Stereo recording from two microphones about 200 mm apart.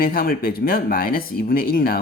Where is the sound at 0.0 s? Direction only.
45° left (ahead or behind).